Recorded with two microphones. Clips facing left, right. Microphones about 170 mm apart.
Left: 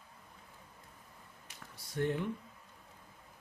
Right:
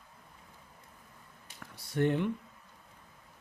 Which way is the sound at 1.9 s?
70° right (ahead or behind).